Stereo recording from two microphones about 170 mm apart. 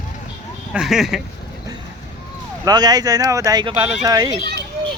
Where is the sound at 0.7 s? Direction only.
Centre (ahead or behind).